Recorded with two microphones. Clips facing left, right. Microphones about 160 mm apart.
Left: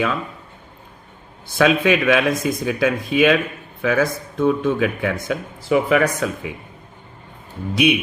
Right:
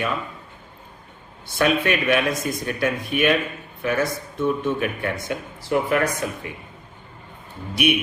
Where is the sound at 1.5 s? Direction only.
90° left.